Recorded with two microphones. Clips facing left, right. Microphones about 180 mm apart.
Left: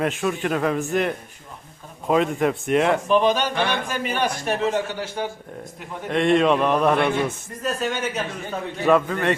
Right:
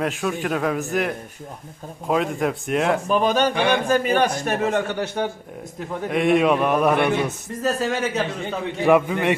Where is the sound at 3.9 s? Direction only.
45° right (ahead or behind).